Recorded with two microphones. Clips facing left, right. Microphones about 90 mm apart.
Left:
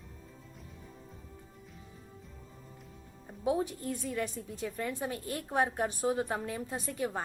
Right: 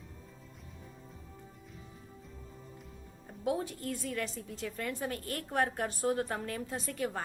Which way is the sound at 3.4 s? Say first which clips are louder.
Left 2 dB; 20° left (ahead or behind).